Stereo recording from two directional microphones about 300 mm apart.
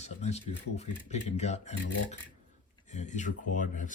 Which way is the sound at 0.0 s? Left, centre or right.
Left.